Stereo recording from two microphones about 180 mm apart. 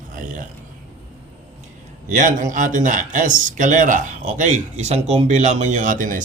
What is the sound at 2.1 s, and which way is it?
Speech, 45° right (ahead or behind).